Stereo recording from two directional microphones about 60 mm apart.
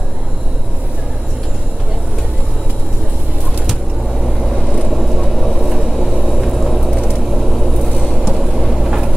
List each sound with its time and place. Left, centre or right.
4.6 s vehicle: centre
4.8 s vehicle: centre